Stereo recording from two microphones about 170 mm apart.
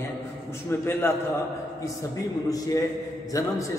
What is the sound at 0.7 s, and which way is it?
Speech, 15° left (ahead or behind).